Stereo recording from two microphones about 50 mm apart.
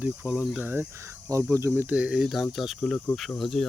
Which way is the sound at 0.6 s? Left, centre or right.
Right.